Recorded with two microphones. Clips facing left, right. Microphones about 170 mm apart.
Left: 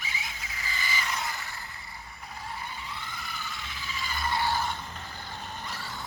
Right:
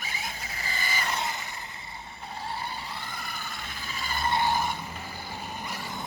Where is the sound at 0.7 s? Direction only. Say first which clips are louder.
Right 1 dB; 50° right (ahead or behind).